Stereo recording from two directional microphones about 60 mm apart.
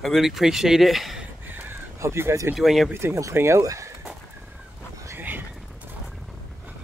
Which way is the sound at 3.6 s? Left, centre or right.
Right.